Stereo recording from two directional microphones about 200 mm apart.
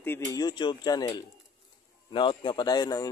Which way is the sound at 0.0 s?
15° left (ahead or behind).